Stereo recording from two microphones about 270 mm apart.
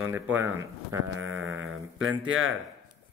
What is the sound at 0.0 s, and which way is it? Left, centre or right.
Speech, centre.